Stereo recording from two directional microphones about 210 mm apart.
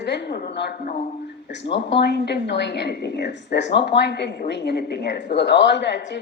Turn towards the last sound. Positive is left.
turn(degrees=55)  # may be behind; listen again after turning